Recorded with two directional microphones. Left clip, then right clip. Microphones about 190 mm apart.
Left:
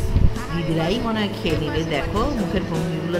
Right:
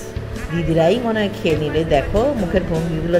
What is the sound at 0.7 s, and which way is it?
Speech, 10° right (ahead or behind).